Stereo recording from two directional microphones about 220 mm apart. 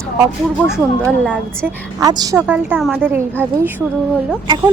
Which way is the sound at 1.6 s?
15° right (ahead or behind).